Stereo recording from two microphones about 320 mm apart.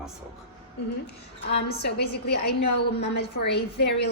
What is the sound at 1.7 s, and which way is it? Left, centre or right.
A woman's voice, left.